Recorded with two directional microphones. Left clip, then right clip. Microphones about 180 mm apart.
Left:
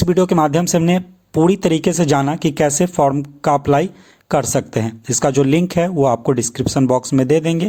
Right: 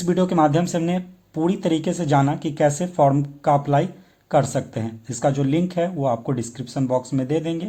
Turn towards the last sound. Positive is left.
turn(degrees=40)  # may be behind; listen again after turning